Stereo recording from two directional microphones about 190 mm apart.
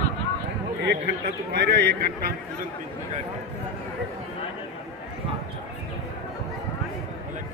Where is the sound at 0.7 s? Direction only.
60° right (ahead or behind).